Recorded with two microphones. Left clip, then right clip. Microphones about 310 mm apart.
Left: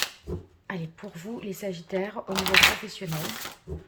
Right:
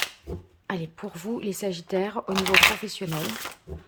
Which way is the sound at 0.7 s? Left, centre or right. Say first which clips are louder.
Right 4 dB; centre.